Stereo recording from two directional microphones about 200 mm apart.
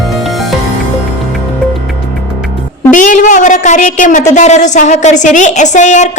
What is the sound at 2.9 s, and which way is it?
A woman's voice, 40° left (ahead or behind).